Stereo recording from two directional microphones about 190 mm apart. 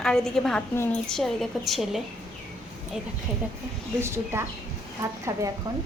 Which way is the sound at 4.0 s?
15° right (ahead or behind).